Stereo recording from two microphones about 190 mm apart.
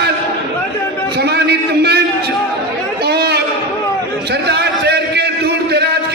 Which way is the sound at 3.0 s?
60° right (ahead or behind).